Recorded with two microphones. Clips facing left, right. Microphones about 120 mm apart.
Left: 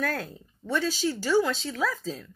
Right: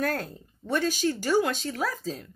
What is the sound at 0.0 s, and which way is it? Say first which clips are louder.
Speech: right 2 dB; 45° right (ahead or behind).